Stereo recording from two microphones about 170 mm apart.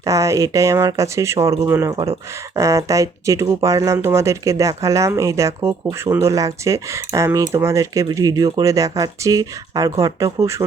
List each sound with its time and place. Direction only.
0.0 s speech: 20° right (ahead or behind)